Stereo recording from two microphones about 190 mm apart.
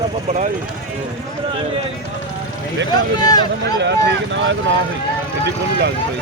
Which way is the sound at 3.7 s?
65° right (ahead or behind).